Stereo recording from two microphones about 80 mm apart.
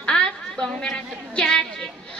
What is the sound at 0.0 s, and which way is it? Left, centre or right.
A woman's voice, centre.